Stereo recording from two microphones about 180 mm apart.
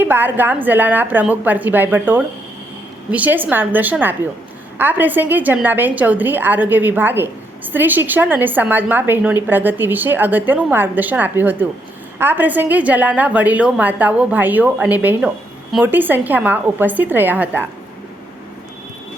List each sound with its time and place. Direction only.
0.0 s a woman's voice: 10° right (ahead or behind)